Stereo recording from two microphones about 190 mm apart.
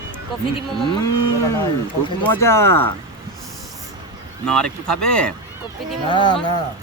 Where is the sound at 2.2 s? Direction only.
10° left (ahead or behind).